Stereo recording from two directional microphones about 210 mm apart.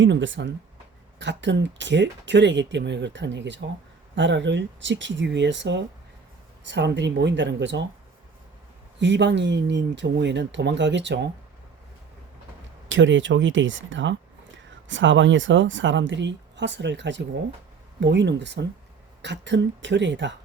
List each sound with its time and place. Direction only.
0.0 s speech: 60° right (ahead or behind)
9.0 s speech: 55° right (ahead or behind)
12.9 s speech: 60° right (ahead or behind)